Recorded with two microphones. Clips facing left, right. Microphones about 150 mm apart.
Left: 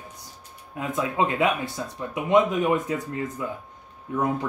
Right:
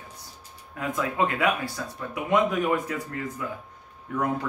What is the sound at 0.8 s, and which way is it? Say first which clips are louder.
Speech: left 1 dB; 20° left (ahead or behind).